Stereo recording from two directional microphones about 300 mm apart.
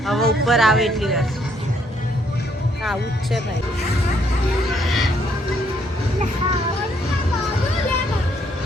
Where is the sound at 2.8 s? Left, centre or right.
Centre.